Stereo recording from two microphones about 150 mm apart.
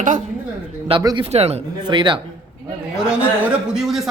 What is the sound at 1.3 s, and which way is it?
Speech, 45° right (ahead or behind).